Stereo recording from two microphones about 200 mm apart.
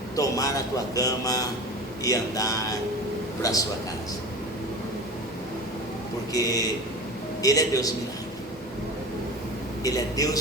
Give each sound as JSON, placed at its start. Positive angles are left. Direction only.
{"t": 0.2, "sound": "speech", "side_deg": 15}
{"t": 6.3, "sound": "speech", "side_deg": 15}
{"t": 9.8, "sound": "speech", "side_deg": 15}